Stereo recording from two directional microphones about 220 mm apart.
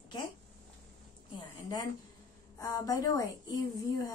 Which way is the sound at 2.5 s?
15° left (ahead or behind).